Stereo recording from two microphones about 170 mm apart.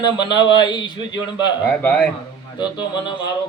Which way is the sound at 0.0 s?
25° left (ahead or behind).